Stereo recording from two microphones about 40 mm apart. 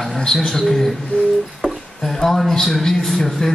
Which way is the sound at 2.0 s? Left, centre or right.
Centre.